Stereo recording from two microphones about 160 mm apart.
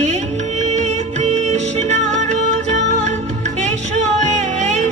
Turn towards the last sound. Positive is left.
turn(degrees=-45)  # may be behind; listen again after turning